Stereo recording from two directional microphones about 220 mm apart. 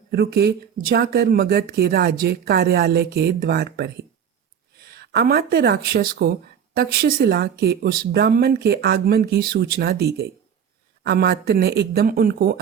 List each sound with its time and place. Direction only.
0.1 s speech: 50° right (ahead or behind)